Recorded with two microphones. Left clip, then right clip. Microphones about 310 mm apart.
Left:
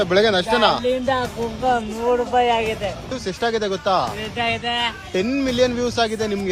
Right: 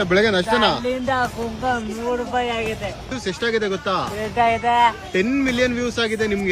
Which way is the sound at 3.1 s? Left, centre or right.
Centre.